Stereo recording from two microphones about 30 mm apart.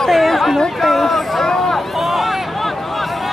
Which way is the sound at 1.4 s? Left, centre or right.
Centre.